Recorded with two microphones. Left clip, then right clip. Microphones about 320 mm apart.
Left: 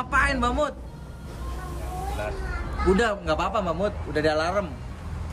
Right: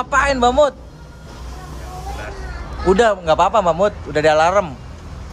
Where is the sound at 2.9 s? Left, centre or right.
Centre.